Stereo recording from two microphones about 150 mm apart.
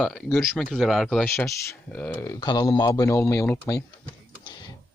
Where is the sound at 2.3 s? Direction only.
30° left (ahead or behind).